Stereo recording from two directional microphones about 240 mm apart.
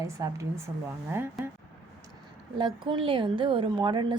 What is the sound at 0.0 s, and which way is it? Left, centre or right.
A woman's voice, centre.